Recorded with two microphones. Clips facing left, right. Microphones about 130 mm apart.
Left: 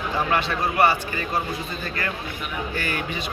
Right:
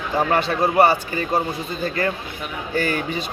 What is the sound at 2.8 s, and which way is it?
Speech, 40° right (ahead or behind).